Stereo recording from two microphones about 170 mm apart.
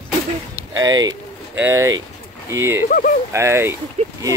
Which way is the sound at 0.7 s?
20° right (ahead or behind).